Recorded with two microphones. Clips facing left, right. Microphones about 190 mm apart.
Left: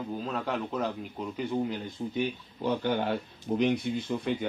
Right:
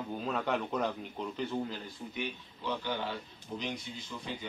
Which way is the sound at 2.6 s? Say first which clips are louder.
Left 8 dB; 50° left (ahead or behind).